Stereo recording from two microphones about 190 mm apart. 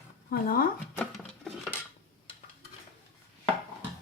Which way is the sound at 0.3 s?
50° left (ahead or behind).